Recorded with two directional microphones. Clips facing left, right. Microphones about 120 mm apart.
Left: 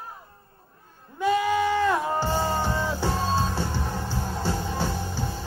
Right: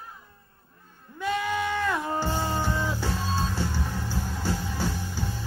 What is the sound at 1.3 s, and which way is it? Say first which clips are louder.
Goat: left 5 dB; 30° left (ahead or behind).